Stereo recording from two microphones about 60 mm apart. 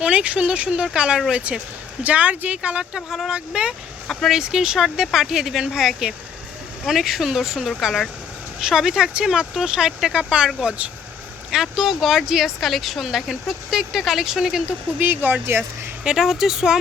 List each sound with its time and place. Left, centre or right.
0.0 s speech: right
3.1 s speech: centre
3.3 s speech: centre
14.9 s speech: right
16.0 s speech: centre